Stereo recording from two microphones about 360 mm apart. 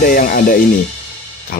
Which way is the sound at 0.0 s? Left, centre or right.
Left.